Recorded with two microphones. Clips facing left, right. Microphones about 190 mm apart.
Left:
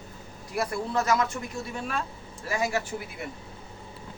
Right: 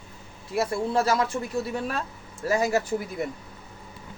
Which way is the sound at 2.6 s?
40° right (ahead or behind).